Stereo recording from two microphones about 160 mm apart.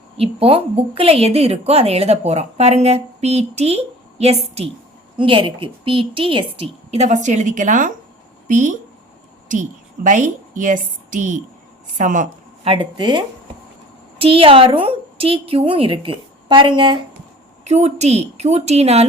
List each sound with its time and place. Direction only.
0.2 s a woman's voice: 35° right (ahead or behind); by 12.3 s 55° right (ahead or behind)
12.6 s a woman's voice: 35° right (ahead or behind)
17.6 s a woman's voice: 45° right (ahead or behind)